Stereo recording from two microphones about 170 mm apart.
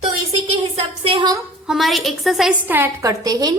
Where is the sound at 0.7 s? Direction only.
30° right (ahead or behind).